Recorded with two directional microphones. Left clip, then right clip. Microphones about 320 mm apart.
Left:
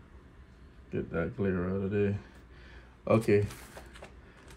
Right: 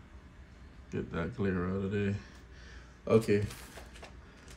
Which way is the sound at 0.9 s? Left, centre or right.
Centre.